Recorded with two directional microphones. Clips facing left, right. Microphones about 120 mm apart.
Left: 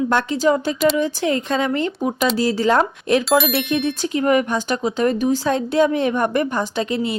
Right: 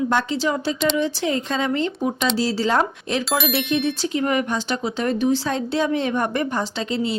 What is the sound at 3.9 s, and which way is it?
Speech, 50° left (ahead or behind).